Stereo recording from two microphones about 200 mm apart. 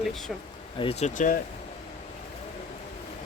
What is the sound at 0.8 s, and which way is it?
Speech, 30° left (ahead or behind).